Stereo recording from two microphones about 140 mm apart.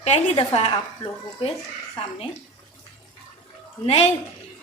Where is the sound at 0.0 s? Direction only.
50° left (ahead or behind).